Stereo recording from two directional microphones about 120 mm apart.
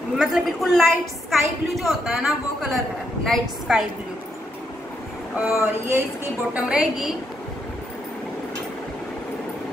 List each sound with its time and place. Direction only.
0.2 s a woman's voice: 5° right (ahead or behind)
5.5 s speech: 20° right (ahead or behind)
6.5 s a woman's voice: 10° right (ahead or behind)